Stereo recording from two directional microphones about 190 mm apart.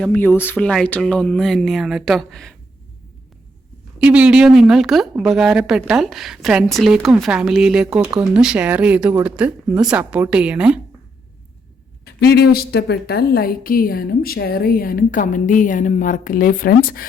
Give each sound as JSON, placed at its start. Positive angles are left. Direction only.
{"t": 0.0, "sound": "a woman's voice", "side_deg": 10}
{"t": 4.0, "sound": "a woman's voice", "side_deg": -5}
{"t": 12.0, "sound": "a woman's voice", "side_deg": 60}